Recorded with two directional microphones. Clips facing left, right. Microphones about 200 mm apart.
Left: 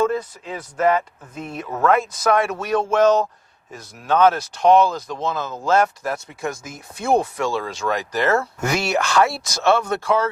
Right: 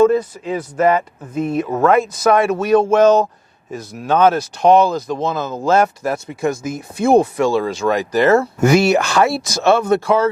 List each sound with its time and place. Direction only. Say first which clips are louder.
0.0 s speech: right 8 dB; 10° right (ahead or behind)
2.0 s speech: right 5 dB; 5° right (ahead or behind)